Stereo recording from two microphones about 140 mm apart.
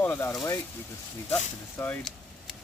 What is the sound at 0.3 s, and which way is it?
Speech, 30° left (ahead or behind).